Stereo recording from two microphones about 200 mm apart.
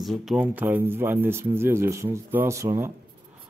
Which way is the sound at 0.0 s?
Centre (ahead or behind).